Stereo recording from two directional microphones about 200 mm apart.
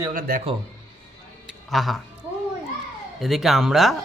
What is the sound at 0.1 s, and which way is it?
Speech, 45° right (ahead or behind).